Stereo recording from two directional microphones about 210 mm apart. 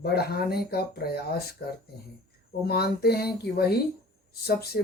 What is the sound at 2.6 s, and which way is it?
Speech, 50° left (ahead or behind).